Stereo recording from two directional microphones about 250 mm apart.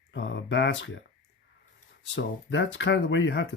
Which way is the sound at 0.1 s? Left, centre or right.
Left.